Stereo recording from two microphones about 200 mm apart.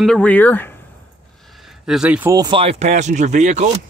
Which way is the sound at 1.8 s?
5° right (ahead or behind).